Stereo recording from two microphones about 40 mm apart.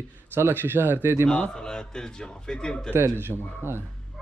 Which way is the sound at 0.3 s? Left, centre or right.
Right.